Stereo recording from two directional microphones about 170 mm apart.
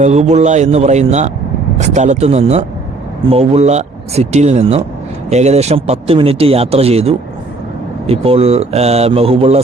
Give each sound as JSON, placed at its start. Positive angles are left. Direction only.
{"t": 0.0, "sound": "a man's voice", "side_deg": -40}